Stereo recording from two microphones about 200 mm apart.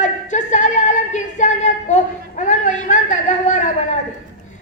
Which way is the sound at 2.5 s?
40° left (ahead or behind).